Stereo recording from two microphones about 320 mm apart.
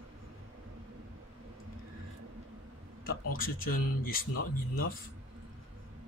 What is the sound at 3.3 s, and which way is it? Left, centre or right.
Speech, left.